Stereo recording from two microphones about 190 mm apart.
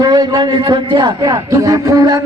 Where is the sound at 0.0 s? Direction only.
20° right (ahead or behind).